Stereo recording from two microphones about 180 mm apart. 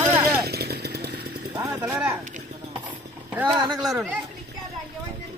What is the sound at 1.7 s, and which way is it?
Speech, 10° right (ahead or behind).